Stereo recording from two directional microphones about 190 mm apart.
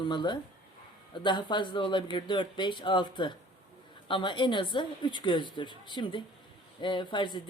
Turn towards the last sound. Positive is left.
turn(degrees=25)  # may be behind; listen again after turning